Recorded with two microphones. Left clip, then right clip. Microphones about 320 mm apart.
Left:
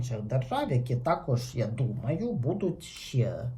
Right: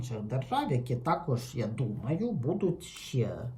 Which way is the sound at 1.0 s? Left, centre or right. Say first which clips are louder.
Left 3 dB; centre.